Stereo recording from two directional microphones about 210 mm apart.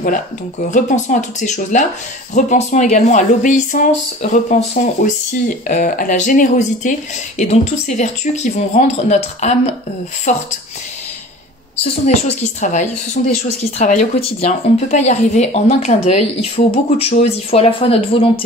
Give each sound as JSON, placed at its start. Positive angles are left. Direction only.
{"t": 0.7, "sound": "speech", "side_deg": 35}
{"t": 11.8, "sound": "speech", "side_deg": 30}